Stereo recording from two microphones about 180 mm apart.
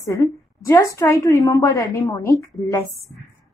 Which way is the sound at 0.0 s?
15° left (ahead or behind).